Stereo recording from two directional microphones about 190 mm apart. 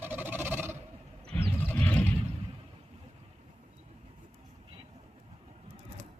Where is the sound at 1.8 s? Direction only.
5° left (ahead or behind).